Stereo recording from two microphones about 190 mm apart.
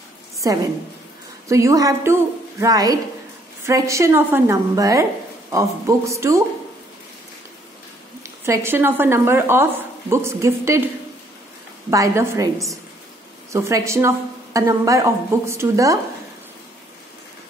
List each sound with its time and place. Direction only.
0.4 s a woman's voice: 20° right (ahead or behind)
8.2 s speech: 15° right (ahead or behind)
11.9 s speech: 15° right (ahead or behind)
13.5 s speech: 15° right (ahead or behind)